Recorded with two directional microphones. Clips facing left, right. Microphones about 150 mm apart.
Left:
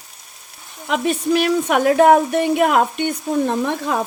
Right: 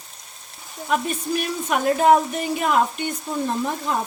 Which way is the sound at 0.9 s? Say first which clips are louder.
Left 5 dB; 80° left.